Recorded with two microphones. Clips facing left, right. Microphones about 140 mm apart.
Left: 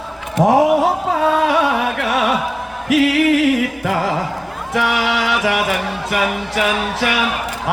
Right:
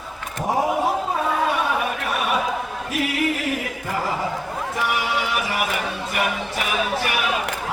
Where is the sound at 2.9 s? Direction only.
90° left.